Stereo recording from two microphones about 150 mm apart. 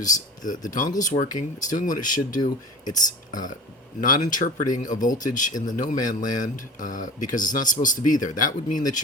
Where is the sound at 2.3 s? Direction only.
25° left (ahead or behind).